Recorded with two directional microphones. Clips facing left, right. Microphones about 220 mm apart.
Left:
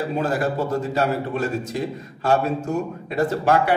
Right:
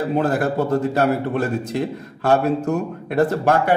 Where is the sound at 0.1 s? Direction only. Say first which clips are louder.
Right 5 dB; 55° right (ahead or behind).